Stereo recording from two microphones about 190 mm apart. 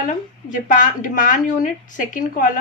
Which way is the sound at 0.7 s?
45° left (ahead or behind).